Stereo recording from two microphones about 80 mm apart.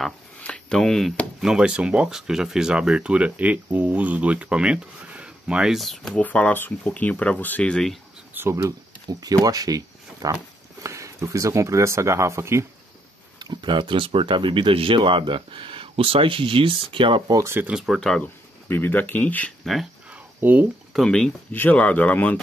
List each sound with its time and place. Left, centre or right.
0.4 s a sound: centre
1.4 s speech: centre
6.1 s speech: centre
7.7 s speech: centre
8.4 s speech: right
9.0 s speech: right
13.4 s speech: right
17.4 s speech: right
17.6 s speech: centre
18.2 s speech: left
19.6 s speech: centre
20.3 s speech: right
20.9 s speech: centre
21.5 s speech: left